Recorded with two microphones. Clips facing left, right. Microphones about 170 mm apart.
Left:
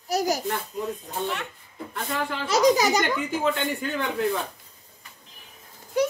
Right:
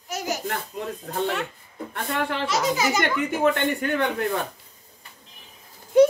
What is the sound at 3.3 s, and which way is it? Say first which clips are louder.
Speech: right 6 dB; 60° right (ahead or behind).